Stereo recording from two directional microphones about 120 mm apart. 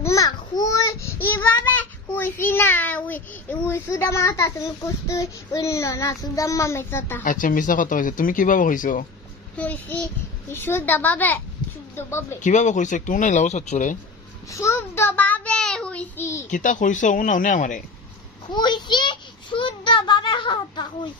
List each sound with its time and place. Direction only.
0.0 s a child's voice: 30° left (ahead or behind)
7.3 s speech: 90° left
9.6 s child singing: 10° left (ahead or behind)
12.0 s a woman's voice: 20° left (ahead or behind)
12.4 s speech: 90° left
14.5 s child singing: 25° left (ahead or behind)
16.4 s speech: 90° left
18.5 s a child's voice: 40° left (ahead or behind)